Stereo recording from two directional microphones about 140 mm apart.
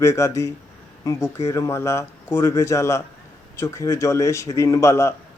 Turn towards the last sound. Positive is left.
turn(degrees=20)  # may be behind; listen again after turning